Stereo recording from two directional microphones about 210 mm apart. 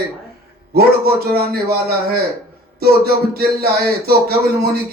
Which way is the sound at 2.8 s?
45° right (ahead or behind).